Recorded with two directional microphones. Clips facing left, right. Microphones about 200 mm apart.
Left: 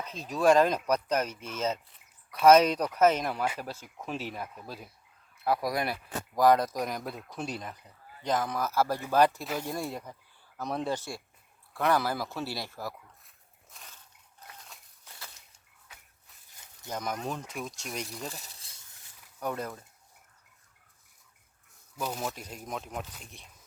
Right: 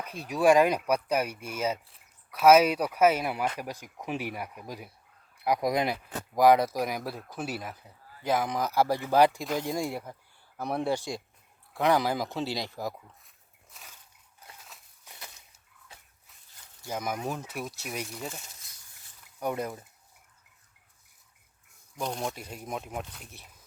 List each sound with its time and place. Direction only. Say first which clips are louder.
0.0 s speech: right 1 dB; 10° right (ahead or behind)
13.2 s a sound: even; centre (ahead or behind)
16.8 s speech: right 2 dB; 10° right (ahead or behind)
18.3 s snake: right 1 dB; 30° left (ahead or behind)
19.4 s speech: right 3 dB; 10° right (ahead or behind)
21.9 s speech: right 1 dB; 5° left (ahead or behind)
22.4 s speech: right 2 dB; 5° right (ahead or behind)